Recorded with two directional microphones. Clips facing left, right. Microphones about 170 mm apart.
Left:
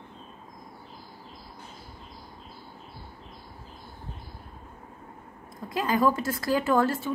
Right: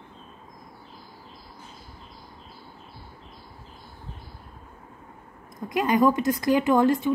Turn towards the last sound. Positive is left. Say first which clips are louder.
# right 4 dB
turn(degrees=-15)  # may be behind; listen again after turning